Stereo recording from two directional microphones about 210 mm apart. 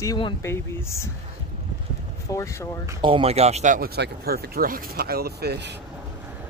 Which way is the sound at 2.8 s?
25° right (ahead or behind).